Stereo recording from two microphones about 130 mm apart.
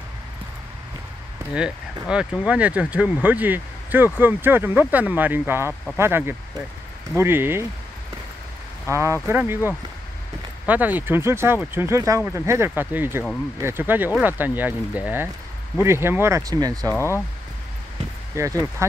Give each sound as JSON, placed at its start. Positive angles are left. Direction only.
{"t": 2.0, "sound": "speech", "side_deg": -10}
{"t": 8.9, "sound": "speech", "side_deg": -20}
{"t": 16.9, "sound": "speech", "side_deg": 20}
{"t": 18.3, "sound": "speech", "side_deg": -25}